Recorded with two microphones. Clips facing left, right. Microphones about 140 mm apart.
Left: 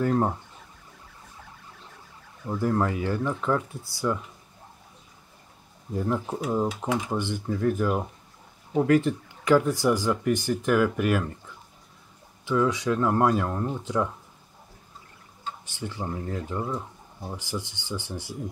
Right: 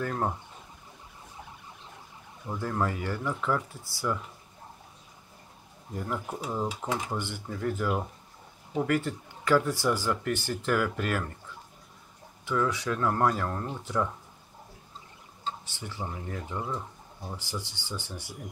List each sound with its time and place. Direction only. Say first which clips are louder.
0.0 s speech: left 6 dB; 20° left (ahead or behind)
2.6 s speech: left 5 dB; 20° left (ahead or behind)
5.9 s speech: left 6 dB; 25° left (ahead or behind)
6.4 s speech: left 6 dB; 5° left (ahead or behind)
12.4 s speech: left 5 dB; 15° left (ahead or behind)
15.9 s speech: left 4 dB; 20° left (ahead or behind)
16.6 s pigeon: left 3 dB; 20° left (ahead or behind)
17.3 s speech: left 4 dB; 15° left (ahead or behind)